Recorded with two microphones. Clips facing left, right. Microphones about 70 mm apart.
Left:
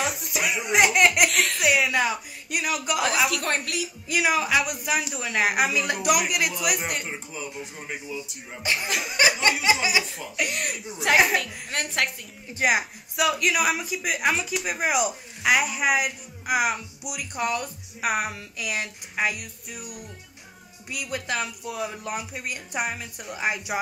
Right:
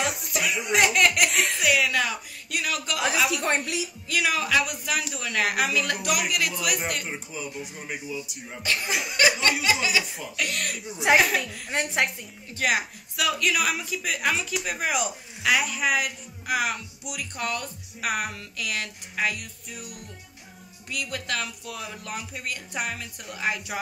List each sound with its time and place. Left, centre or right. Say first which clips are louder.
0.1 s speech: even; centre
3.3 s a woman's voice: right 1 dB; centre
4.1 s a man's voice: left 2 dB; centre
9.1 s a man's voice: left 1 dB; centre
11.7 s a woman's voice: right 2 dB; centre
12.5 s a man's voice: left 2 dB; centre